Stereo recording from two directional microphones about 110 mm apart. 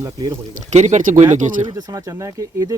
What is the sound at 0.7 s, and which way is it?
Speech, 90° right.